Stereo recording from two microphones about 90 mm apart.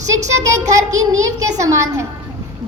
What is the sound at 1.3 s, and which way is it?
Speech, 35° right (ahead or behind).